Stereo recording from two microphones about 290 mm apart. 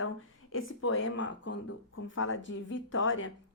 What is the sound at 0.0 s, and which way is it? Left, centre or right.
A woman's voice, left.